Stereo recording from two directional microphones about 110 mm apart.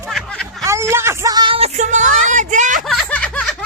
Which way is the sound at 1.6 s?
90° right.